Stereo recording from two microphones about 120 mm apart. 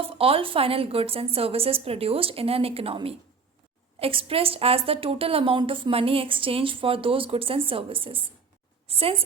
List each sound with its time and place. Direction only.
0.0 s a woman's voice: 50° right (ahead or behind)